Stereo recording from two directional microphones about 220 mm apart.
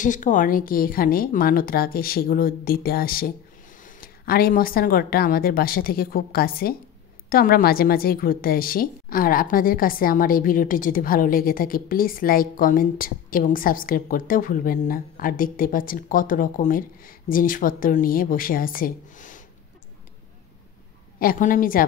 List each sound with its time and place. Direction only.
0.0 s a woman's voice: 35° left (ahead or behind)
21.2 s a woman's voice: 40° left (ahead or behind)